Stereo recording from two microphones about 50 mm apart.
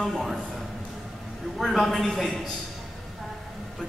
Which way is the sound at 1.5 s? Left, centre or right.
Centre.